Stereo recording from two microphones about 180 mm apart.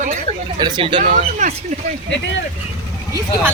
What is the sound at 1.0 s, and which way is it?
Speech, 40° right (ahead or behind).